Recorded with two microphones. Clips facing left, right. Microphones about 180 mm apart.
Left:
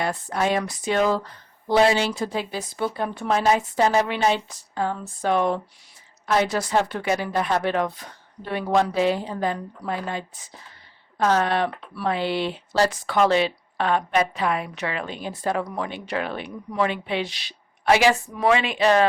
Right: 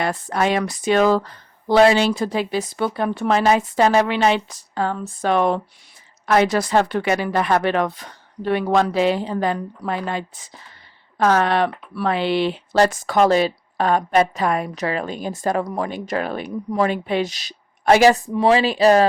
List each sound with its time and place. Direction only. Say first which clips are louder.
0.0 s speech: right 3 dB; 75° right (ahead or behind); by 18.2 s 45° right (ahead or behind)
18.3 s speech: right 5 dB; 30° right (ahead or behind)